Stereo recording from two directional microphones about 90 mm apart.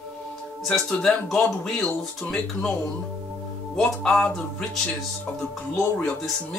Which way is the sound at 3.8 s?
5° left (ahead or behind).